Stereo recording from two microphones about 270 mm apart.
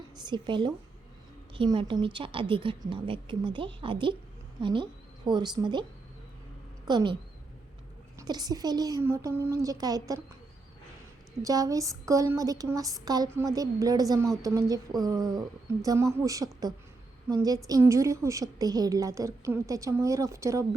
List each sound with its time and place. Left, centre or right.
0.3 s a woman's voice: centre
6.8 s a woman's voice: centre
8.2 s a woman's voice: centre
11.4 s a woman's voice: centre